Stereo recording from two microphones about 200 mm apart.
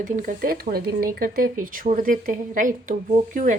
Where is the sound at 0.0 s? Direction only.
40° right (ahead or behind).